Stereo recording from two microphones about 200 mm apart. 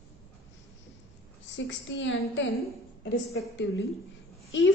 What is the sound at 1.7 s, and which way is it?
A woman's voice, 70° left (ahead or behind).